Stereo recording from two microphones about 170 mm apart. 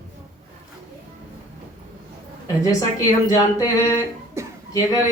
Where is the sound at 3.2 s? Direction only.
20° left (ahead or behind).